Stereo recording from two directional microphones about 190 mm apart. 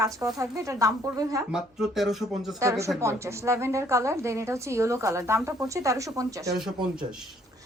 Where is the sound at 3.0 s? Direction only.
15° right (ahead or behind).